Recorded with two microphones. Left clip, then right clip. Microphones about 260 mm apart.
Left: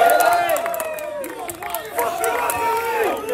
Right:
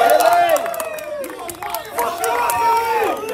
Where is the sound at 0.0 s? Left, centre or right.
Right.